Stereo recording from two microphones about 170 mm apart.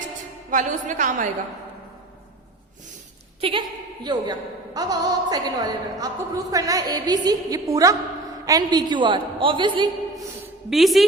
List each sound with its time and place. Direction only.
0.5 s a woman's voice: 45° right (ahead or behind)
3.4 s a woman's voice: 35° right (ahead or behind)
10.7 s a woman's voice: centre (ahead or behind)